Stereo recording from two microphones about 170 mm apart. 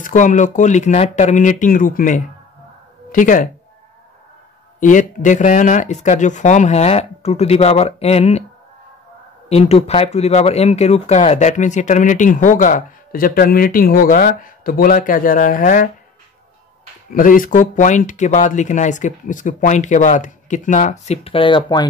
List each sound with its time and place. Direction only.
0.0 s speech: 50° left (ahead or behind)
4.7 s speech: 50° left (ahead or behind)
9.5 s speech: 40° left (ahead or behind)
17.1 s speech: 55° left (ahead or behind); by 21.8 s 25° left (ahead or behind)